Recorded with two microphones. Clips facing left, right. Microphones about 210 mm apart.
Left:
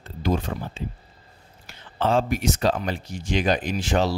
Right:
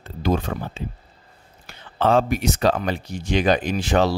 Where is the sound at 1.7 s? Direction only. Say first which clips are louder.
Right 4 dB; 60° right (ahead or behind).